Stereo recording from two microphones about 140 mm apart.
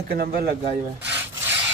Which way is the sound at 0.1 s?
90° right.